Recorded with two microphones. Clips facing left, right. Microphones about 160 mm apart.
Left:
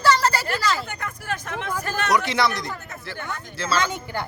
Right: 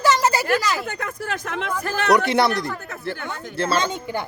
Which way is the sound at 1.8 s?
60° right (ahead or behind).